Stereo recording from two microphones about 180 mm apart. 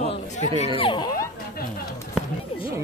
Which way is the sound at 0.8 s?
25° left (ahead or behind).